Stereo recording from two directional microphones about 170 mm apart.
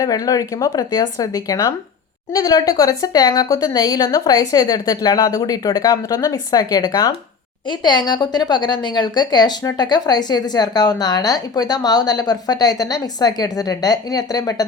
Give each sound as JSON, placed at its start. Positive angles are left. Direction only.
{"t": 0.0, "sound": "a woman's voice", "side_deg": 20}